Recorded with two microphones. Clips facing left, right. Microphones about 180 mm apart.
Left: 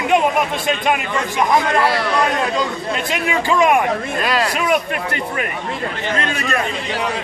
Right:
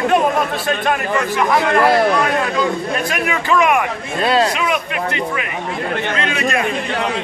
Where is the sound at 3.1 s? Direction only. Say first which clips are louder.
Left 1 dB; 25° left (ahead or behind).